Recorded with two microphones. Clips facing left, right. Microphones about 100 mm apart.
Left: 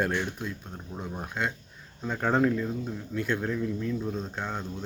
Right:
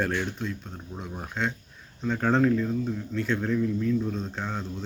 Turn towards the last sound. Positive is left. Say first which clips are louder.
# right 1 dB
turn(degrees=0)  # may be behind; listen again after turning